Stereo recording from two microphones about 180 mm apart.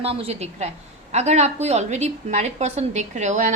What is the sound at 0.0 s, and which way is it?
A woman's voice, 30° right (ahead or behind).